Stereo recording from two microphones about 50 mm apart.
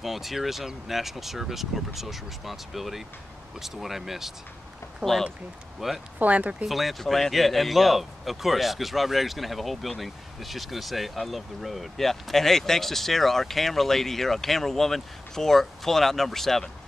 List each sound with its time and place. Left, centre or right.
0.0 s speech: centre
5.0 s speech: centre
5.8 s speech: centre
6.1 s speech: right
6.6 s speech: centre